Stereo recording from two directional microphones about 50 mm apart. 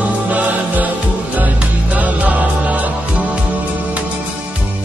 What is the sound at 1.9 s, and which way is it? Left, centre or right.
Music, right.